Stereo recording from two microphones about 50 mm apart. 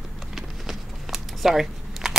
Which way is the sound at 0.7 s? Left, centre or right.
Centre.